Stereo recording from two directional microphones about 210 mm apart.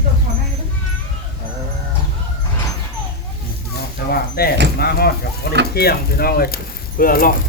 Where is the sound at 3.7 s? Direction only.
45° left (ahead or behind).